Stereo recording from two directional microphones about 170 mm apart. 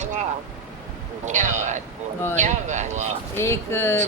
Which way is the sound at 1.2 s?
45° right (ahead or behind).